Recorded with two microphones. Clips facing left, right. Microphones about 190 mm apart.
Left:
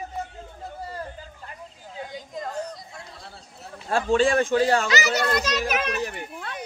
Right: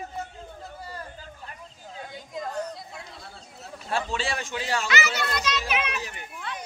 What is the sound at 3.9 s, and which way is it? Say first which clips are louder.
Speech: left 9 dB; 45° left (ahead or behind).